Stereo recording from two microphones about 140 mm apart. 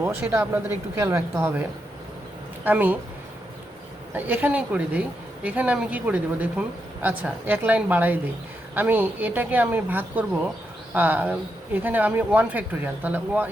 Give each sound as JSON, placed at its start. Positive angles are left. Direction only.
{"t": 0.0, "sound": "a woman's voice", "side_deg": -15}
{"t": 2.6, "sound": "a woman's voice", "side_deg": -15}
{"t": 4.1, "sound": "a woman's voice", "side_deg": -10}